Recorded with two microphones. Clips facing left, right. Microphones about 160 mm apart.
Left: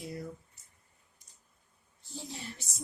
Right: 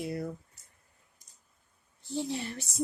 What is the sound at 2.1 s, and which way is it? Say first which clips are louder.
Speech: right 10 dB; 65° right (ahead or behind).